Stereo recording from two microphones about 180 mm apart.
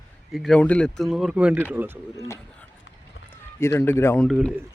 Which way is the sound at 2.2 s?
15° left (ahead or behind).